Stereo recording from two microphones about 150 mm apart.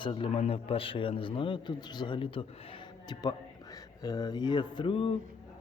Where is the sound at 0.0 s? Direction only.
35° left (ahead or behind).